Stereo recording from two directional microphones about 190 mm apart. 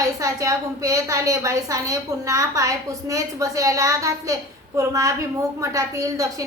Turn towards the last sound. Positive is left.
turn(degrees=-20)  # may be behind; listen again after turning